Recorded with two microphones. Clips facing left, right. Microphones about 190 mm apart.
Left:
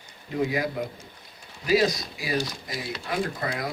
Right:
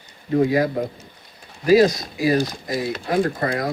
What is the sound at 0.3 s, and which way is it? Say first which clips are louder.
Speech: right 8 dB; 40° right (ahead or behind).